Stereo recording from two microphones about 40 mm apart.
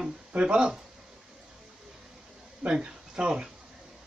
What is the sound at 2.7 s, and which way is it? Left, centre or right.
Speech, right.